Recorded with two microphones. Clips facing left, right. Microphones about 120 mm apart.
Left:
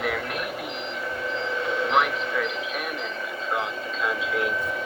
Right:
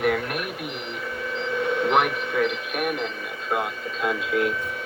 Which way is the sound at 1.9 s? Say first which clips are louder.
Even; 50° right (ahead or behind).